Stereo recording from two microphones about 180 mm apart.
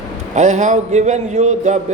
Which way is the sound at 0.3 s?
40° right (ahead or behind).